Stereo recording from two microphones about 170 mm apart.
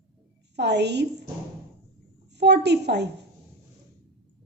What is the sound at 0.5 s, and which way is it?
Speech, 85° right.